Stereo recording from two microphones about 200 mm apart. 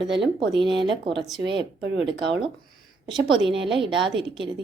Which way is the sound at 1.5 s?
60° right (ahead or behind).